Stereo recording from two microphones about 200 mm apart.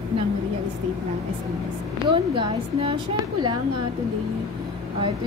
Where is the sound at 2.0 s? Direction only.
25° right (ahead or behind).